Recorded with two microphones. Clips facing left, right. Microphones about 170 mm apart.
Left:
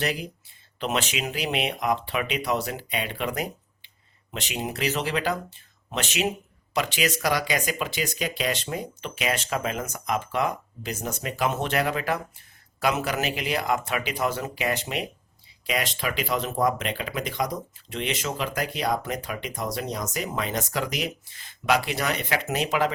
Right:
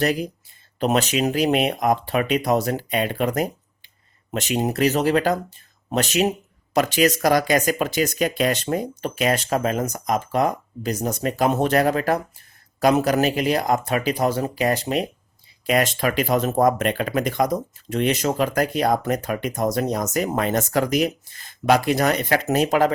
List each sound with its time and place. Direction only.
0.0 s speech: 45° right (ahead or behind)